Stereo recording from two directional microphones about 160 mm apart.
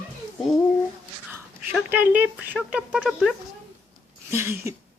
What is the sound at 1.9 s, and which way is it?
Speech, 10° right (ahead or behind).